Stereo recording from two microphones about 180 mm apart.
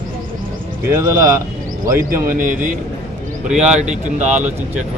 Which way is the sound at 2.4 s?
45° right (ahead or behind).